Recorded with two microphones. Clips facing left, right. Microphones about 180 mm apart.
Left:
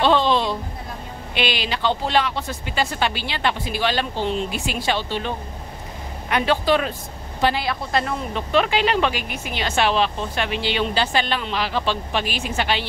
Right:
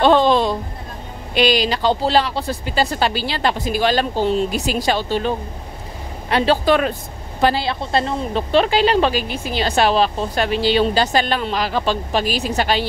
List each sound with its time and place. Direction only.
0.0 s a sound: 45° right (ahead or behind)
1.3 s speech: 40° right (ahead or behind)
6.3 s speech: 30° right (ahead or behind)
6.6 s speech: 55° right (ahead or behind)
7.4 s speech: 30° right (ahead or behind)